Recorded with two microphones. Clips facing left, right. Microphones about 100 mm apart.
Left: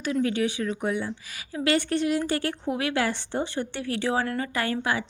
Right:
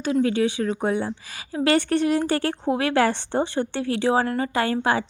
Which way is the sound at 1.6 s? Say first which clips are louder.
Right 4 dB; 50° right (ahead or behind).